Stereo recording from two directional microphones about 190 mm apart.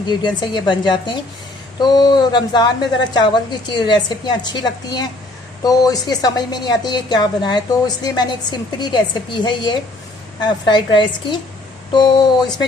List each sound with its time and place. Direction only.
0.1 s a woman's voice: 25° left (ahead or behind)